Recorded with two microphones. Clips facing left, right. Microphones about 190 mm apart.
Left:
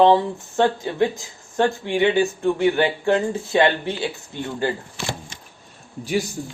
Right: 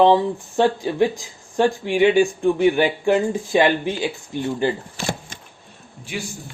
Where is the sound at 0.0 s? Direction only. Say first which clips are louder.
Even; 15° right (ahead or behind).